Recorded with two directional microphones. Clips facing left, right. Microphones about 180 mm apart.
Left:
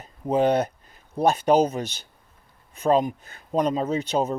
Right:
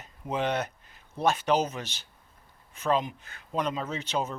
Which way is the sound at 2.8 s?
45° left (ahead or behind).